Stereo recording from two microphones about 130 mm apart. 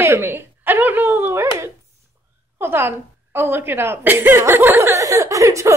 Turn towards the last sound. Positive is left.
turn(degrees=-25)  # may be behind; listen again after turning